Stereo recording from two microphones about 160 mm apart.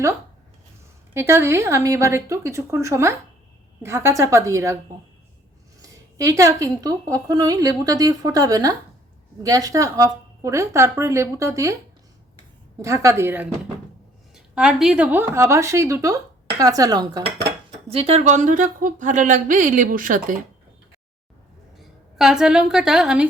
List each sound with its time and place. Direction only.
1.1 s speech: 15° right (ahead or behind)
5.8 s a woman's voice: 20° right (ahead or behind)
12.8 s speech: 20° right (ahead or behind)
17.8 s a woman's voice: 40° right (ahead or behind); by 20.2 s 60° right (ahead or behind)
21.8 s a woman's voice: centre (ahead or behind)